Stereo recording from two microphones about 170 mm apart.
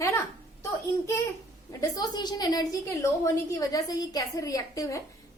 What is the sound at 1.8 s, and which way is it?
A woman's voice, 25° left (ahead or behind).